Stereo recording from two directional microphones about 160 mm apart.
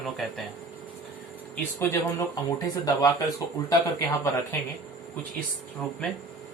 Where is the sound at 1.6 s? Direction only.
15° left (ahead or behind).